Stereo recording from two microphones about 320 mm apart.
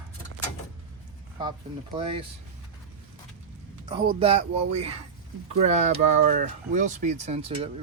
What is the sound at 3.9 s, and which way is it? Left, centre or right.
Speech, centre.